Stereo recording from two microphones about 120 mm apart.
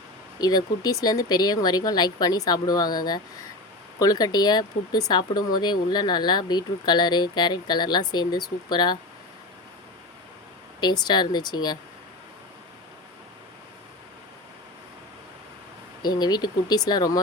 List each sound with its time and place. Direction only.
0.3 s speech: 30° left (ahead or behind)
10.8 s speech: 35° left (ahead or behind)
16.0 s speech: 35° left (ahead or behind)